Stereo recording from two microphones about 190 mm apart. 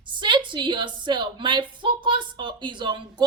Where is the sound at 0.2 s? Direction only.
25° right (ahead or behind).